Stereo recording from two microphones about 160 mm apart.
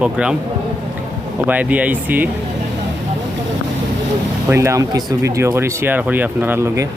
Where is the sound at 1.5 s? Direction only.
10° right (ahead or behind).